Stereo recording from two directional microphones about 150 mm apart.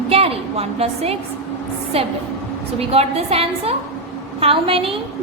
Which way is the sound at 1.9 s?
40° right (ahead or behind).